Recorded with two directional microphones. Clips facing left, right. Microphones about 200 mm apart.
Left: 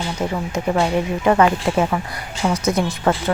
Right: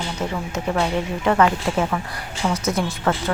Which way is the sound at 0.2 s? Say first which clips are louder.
Left 3 dB; 15° left (ahead or behind).